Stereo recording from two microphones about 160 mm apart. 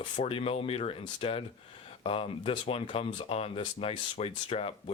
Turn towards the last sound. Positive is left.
turn(degrees=35)  # may be behind; listen again after turning